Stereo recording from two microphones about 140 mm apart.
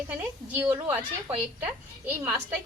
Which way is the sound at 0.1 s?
15° right (ahead or behind).